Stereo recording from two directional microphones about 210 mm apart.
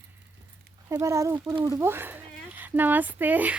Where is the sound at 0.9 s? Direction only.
15° right (ahead or behind).